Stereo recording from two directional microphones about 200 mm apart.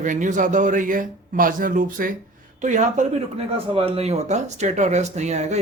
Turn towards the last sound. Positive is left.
turn(degrees=-35)  # may be behind; listen again after turning